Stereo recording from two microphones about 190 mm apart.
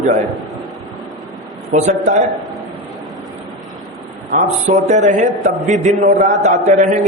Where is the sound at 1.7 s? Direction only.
40° right (ahead or behind).